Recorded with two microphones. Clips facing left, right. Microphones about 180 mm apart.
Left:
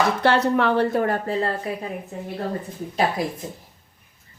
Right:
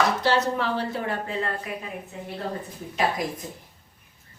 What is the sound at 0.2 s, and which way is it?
A woman's voice, 60° left (ahead or behind).